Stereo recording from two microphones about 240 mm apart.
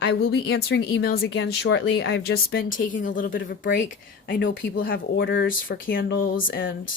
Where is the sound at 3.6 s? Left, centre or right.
Left.